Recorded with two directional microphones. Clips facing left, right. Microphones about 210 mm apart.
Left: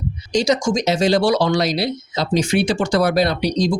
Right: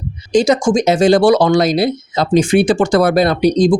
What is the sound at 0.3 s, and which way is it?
Speech, 50° right (ahead or behind).